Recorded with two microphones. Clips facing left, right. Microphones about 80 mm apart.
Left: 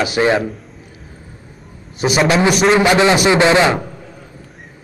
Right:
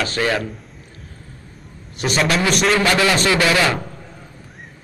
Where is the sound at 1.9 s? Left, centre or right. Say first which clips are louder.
Left 5 dB; centre.